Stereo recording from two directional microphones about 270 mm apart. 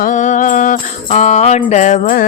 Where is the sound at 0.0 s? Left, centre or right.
Left.